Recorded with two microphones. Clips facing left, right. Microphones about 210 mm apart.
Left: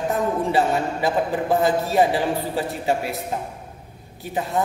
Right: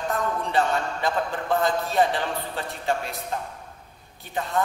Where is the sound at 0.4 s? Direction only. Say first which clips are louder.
Left 3 dB; 5° left (ahead or behind).